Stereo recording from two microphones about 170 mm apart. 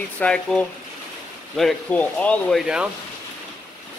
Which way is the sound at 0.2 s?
5° left (ahead or behind).